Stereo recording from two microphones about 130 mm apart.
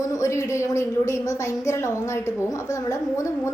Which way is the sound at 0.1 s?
25° left (ahead or behind).